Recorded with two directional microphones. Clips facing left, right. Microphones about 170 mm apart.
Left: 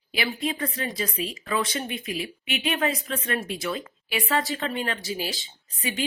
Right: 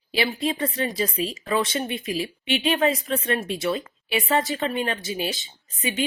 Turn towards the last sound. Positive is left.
turn(degrees=-20)  # may be behind; listen again after turning